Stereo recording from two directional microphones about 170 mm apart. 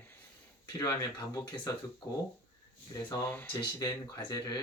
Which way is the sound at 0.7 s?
20° left (ahead or behind).